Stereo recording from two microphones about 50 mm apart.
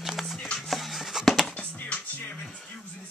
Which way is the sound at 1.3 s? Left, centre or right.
Centre.